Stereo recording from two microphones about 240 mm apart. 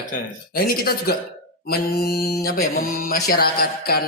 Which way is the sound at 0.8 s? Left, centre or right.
Left.